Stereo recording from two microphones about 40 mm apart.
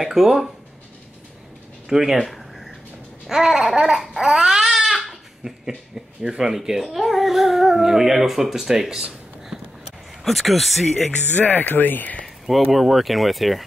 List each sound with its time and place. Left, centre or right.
0.0 s speech: centre
1.9 s speech: centre
2.2 s a sound: centre
3.3 s speech: centre
4.2 s babbling: centre
6.2 s speech: centre
10.2 s speech: centre
11.3 s speech: left
12.7 s speech: centre